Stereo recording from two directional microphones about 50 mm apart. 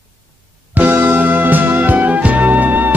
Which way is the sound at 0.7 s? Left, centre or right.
Right.